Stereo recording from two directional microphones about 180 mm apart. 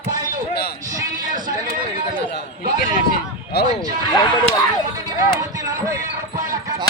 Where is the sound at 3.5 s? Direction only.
65° left (ahead or behind).